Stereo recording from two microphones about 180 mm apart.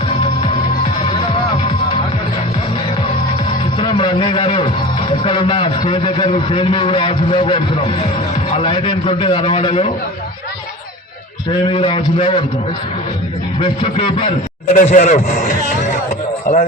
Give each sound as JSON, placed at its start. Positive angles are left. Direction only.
{"t": 3.8, "sound": "a man's voice", "side_deg": 30}
{"t": 11.6, "sound": "a man's voice", "side_deg": 30}
{"t": 14.7, "sound": "a man's voice", "side_deg": 45}